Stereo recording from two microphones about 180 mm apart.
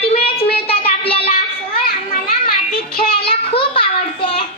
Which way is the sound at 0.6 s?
30° left (ahead or behind).